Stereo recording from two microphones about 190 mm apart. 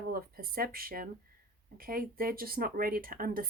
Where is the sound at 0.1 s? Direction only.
50° right (ahead or behind).